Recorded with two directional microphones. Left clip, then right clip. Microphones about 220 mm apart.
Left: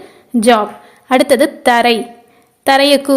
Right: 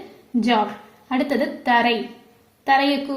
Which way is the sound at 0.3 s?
50° left (ahead or behind).